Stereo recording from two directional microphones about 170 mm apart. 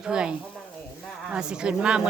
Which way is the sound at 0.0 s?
5° right (ahead or behind).